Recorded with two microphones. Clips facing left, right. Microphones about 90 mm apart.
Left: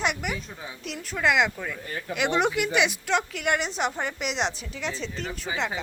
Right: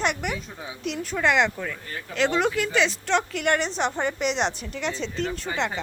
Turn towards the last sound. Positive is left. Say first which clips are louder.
# right 2 dB
turn(degrees=5)  # may be behind; listen again after turning